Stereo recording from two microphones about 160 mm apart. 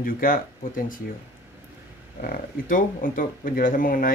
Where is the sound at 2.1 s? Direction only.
60° left (ahead or behind).